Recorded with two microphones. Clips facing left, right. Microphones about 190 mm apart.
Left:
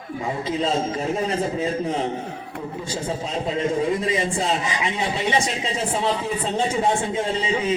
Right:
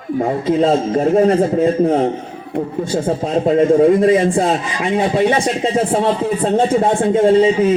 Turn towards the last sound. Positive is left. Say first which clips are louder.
# right 12 dB
turn(degrees=-50)  # may be behind; listen again after turning